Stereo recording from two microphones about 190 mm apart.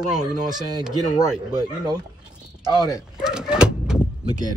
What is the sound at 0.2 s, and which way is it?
Speech, 20° right (ahead or behind).